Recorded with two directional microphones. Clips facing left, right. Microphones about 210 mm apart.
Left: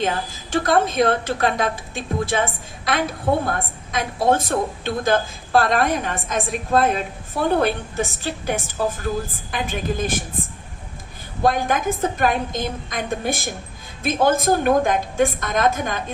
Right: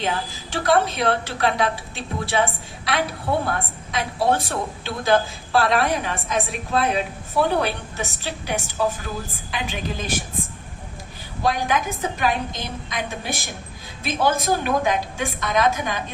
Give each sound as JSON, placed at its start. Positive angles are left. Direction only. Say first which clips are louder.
{"t": 0.0, "sound": "a woman's voice", "louder": "left 2 dB", "side_deg": 45}
{"t": 11.4, "sound": "a woman's voice", "louder": "left 3 dB", "side_deg": 50}